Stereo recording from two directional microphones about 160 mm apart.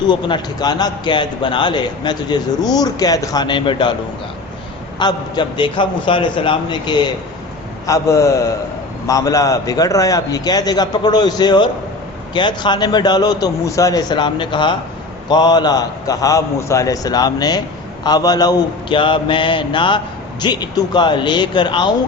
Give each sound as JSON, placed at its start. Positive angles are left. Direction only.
{"t": 0.1, "sound": "a man's voice", "side_deg": 30}
{"t": 4.9, "sound": "a man's voice", "side_deg": 25}